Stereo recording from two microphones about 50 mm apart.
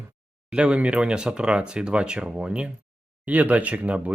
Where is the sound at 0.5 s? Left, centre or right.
Right.